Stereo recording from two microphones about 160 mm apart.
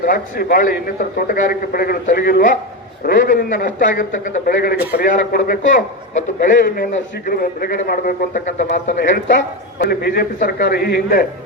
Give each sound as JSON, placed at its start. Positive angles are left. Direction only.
{"t": 0.0, "sound": "a man's voice", "side_deg": 65}
{"t": 5.1, "sound": "a man's voice", "side_deg": 55}
{"t": 7.3, "sound": "a man's voice", "side_deg": 70}
{"t": 7.9, "sound": "a man's voice", "side_deg": 60}
{"t": 9.7, "sound": "a man's voice", "side_deg": 70}